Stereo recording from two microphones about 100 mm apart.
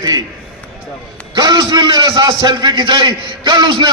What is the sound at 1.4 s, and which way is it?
A man's voice, 45° right (ahead or behind).